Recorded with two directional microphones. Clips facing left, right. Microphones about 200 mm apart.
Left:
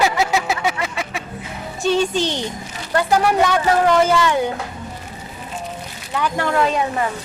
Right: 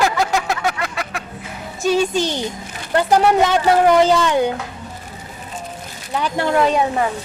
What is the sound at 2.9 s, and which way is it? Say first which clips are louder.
Speech: right 2 dB; 20° right (ahead or behind).